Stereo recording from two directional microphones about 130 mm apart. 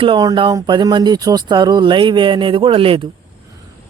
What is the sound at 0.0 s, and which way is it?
A man's voice, 35° right (ahead or behind).